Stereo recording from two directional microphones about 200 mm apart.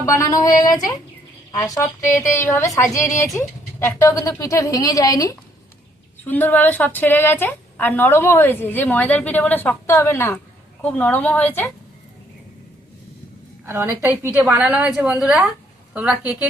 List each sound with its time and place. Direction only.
0.0 s a woman's voice: 15° left (ahead or behind)
13.7 s a woman's voice: 10° right (ahead or behind)